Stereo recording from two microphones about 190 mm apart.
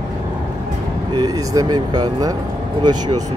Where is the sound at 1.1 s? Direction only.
20° right (ahead or behind).